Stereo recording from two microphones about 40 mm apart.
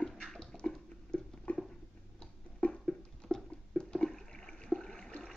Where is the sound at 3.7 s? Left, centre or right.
Centre.